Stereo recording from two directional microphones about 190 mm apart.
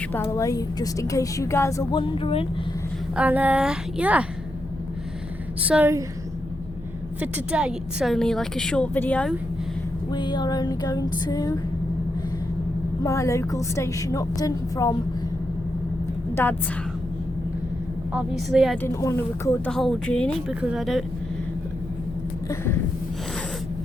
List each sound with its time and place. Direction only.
0.1 s a woman's voice: 15° left (ahead or behind)
3.2 s a woman's voice: 10° right (ahead or behind)
5.6 s a woman's voice: 10° right (ahead or behind)
7.2 s a woman's voice: 5° right (ahead or behind)
10.1 s female singing: 25° left (ahead or behind)
13.0 s a woman's voice: 15° left (ahead or behind)
16.3 s a woman's voice: 10° left (ahead or behind)
18.1 s a woman's voice: 5° right (ahead or behind)
18.8 s a woman's voice: 15° left (ahead or behind)
19.7 s a woman's voice: centre (ahead or behind)
20.5 s a woman's voice: 5° right (ahead or behind)
22.4 s a sound: 10° left (ahead or behind)